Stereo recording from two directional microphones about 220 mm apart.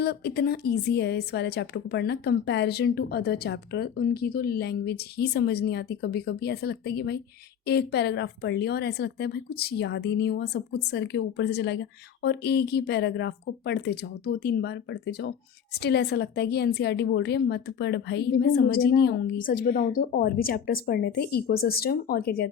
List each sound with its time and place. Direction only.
0.0 s a woman's voice: 45° left (ahead or behind)